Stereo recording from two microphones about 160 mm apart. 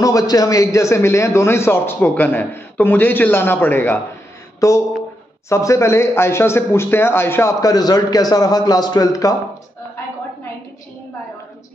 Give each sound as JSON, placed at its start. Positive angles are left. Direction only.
{"t": 0.0, "sound": "a man's voice", "side_deg": 20}